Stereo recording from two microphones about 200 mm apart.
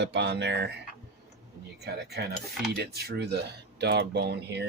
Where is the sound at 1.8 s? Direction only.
55° right (ahead or behind).